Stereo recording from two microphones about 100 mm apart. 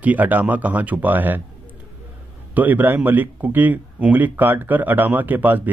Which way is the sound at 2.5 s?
15° right (ahead or behind).